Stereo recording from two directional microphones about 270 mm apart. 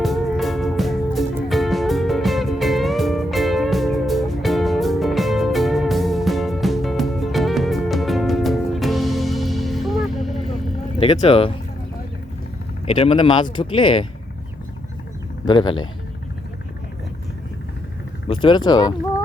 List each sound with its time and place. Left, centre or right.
0.0 s music: centre
11.0 s speech: left
12.8 s speech: left
15.4 s speech: centre
18.3 s speech: centre